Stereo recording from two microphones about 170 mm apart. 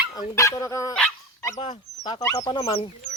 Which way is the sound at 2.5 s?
35° left (ahead or behind).